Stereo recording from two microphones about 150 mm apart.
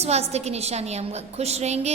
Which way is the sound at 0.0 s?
45° right (ahead or behind).